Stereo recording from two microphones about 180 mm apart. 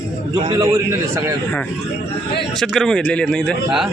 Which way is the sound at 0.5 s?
15° right (ahead or behind).